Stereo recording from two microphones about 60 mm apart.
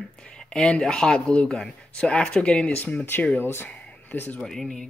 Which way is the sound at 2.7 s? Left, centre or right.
Left.